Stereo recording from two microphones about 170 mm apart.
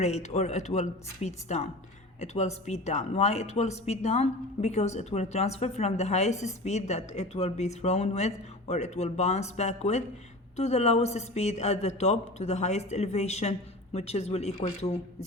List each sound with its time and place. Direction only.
0.0 s speech: 40° left (ahead or behind)